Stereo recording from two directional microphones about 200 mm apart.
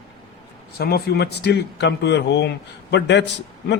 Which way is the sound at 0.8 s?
50° left (ahead or behind).